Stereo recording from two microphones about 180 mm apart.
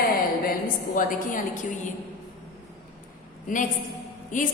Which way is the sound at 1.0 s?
50° left (ahead or behind).